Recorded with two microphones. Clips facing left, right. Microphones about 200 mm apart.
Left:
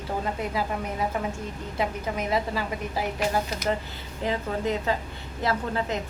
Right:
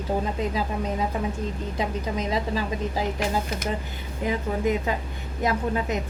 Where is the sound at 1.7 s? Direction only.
20° right (ahead or behind).